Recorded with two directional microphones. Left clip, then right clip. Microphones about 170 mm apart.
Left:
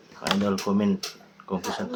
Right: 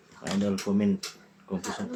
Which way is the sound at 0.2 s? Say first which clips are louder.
Left 5 dB; 10° right (ahead or behind).